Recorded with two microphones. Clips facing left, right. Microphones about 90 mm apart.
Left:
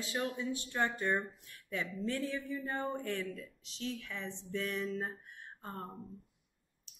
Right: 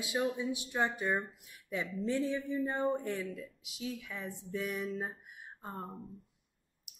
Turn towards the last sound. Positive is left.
turn(degrees=-15)  # may be behind; listen again after turning